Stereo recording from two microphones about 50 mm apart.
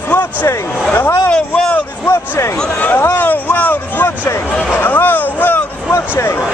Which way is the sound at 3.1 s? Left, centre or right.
Left.